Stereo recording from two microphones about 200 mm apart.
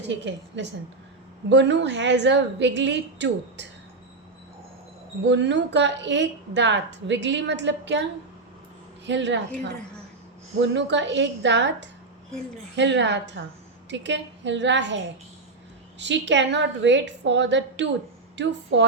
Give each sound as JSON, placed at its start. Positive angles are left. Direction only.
{"t": 0.1, "sound": "a woman's voice", "side_deg": -65}
{"t": 5.2, "sound": "a woman's voice", "side_deg": -60}
{"t": 9.0, "sound": "a woman's voice", "side_deg": -65}
{"t": 10.6, "sound": "a woman's voice", "side_deg": -60}